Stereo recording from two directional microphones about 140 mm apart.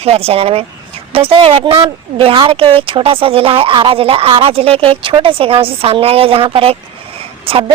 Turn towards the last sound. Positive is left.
turn(degrees=-35)  # may be behind; listen again after turning